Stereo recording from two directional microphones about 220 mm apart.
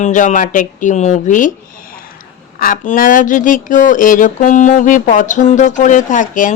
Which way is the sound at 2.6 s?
40° left (ahead or behind).